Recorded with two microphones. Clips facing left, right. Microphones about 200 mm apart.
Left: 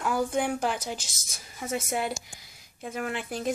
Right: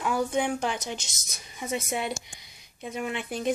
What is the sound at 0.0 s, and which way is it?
Speech, centre (ahead or behind).